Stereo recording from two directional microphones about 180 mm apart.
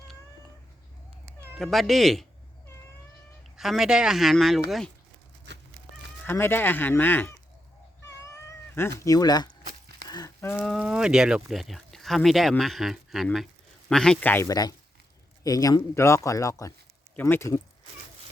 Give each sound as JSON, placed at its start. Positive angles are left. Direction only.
{"t": 1.5, "sound": "speech", "side_deg": 0}
{"t": 3.6, "sound": "speech", "side_deg": 0}
{"t": 5.5, "sound": "fowl", "side_deg": -75}
{"t": 6.2, "sound": "speech", "side_deg": 10}
{"t": 8.2, "sound": "cat", "side_deg": 15}
{"t": 9.0, "sound": "speech", "side_deg": 20}
{"t": 10.8, "sound": "speech", "side_deg": -5}